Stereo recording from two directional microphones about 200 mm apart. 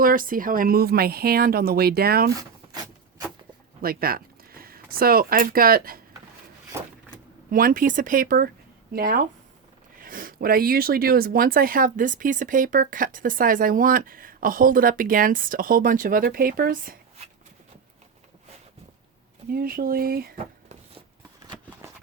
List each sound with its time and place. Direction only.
0.0 s speech: 45° right (ahead or behind)
3.8 s speech: 45° right (ahead or behind)
7.5 s speech: 45° right (ahead or behind)
19.5 s speech: 45° right (ahead or behind)